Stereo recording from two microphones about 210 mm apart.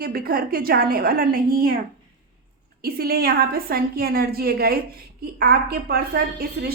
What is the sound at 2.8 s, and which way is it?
A woman's voice, 45° right (ahead or behind).